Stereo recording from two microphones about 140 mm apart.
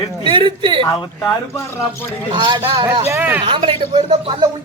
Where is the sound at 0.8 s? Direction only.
25° left (ahead or behind).